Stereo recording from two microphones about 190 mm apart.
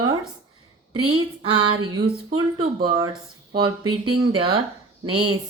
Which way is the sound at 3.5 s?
25° right (ahead or behind).